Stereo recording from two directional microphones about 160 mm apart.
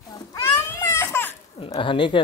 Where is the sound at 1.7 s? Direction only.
30° left (ahead or behind).